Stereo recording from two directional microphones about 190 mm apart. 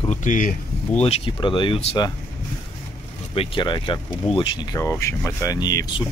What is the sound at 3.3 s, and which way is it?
Speech, 30° left (ahead or behind).